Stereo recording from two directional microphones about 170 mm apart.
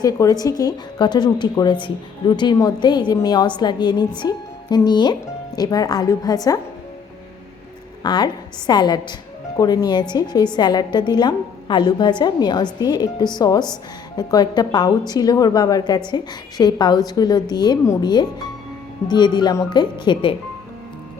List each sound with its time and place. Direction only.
0.0 s a woman's voice: 20° left (ahead or behind)
8.0 s a woman's voice: 25° left (ahead or behind)